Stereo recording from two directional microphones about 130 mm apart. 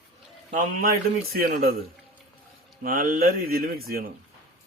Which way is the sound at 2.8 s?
90° right.